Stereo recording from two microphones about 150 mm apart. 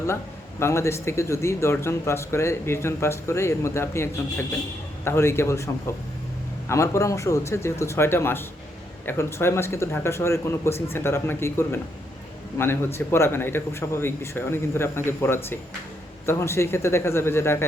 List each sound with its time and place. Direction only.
0.6 s speech: 20° left (ahead or behind)